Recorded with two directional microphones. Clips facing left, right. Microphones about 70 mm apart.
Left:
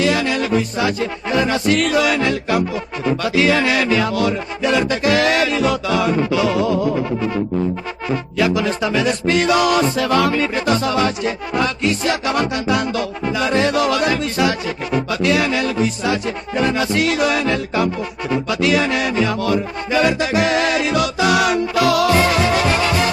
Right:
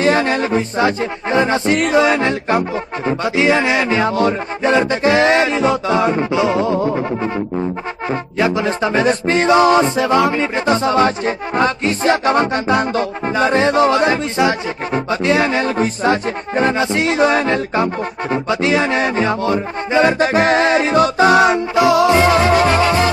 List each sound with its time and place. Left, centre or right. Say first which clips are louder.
0.0 s music: right 3 dB; right